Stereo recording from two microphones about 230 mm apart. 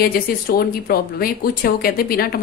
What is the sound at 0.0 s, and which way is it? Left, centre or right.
A woman's voice, left.